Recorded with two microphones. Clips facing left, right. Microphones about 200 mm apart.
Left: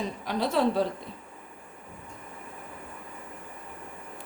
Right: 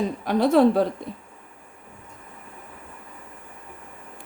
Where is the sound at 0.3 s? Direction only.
55° right (ahead or behind).